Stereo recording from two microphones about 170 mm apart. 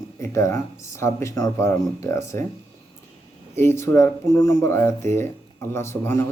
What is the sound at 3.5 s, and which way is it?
Speech, 15° left (ahead or behind).